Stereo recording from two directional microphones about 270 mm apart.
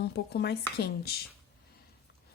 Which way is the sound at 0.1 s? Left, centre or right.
Left.